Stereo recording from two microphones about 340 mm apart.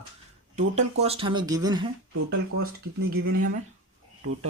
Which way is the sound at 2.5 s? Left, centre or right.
Right.